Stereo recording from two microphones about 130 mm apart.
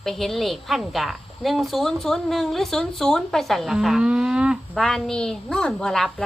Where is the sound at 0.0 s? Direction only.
Centre (ahead or behind).